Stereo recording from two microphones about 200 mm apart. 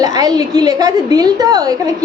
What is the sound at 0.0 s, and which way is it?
A woman's voice, 20° right (ahead or behind).